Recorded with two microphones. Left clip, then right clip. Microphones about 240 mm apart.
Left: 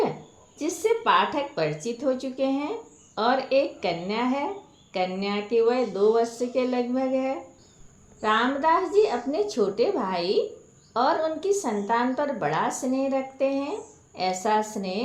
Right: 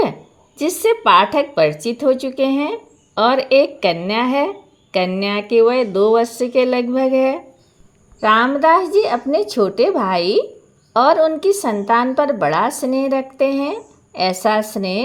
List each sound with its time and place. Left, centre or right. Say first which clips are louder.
0.5 s speech: right 8 dB; right